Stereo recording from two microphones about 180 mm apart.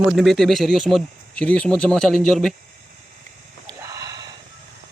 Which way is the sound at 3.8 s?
20° right (ahead or behind).